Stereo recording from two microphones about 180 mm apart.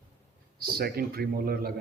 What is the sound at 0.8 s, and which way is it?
Speech, 60° right (ahead or behind).